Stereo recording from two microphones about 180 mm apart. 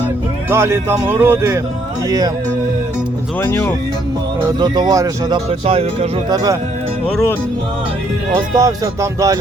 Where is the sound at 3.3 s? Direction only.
10° left (ahead or behind).